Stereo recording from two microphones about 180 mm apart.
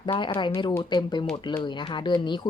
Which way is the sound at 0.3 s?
25° left (ahead or behind).